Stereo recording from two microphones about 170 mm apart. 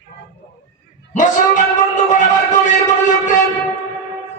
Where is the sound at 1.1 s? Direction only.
50° left (ahead or behind).